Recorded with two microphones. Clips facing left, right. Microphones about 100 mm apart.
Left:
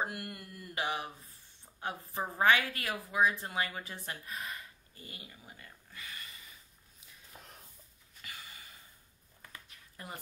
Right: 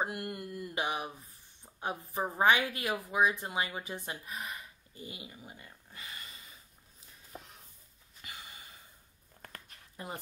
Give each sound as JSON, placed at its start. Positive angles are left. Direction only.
{"t": 0.0, "sound": "speech", "side_deg": -25}
{"t": 8.2, "sound": "a sound", "side_deg": -25}
{"t": 10.0, "sound": "speech", "side_deg": -25}